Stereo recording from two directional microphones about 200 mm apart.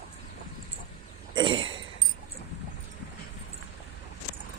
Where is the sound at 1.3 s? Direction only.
25° right (ahead or behind).